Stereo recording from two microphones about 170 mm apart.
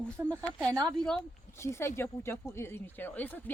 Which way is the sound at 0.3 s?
5° left (ahead or behind).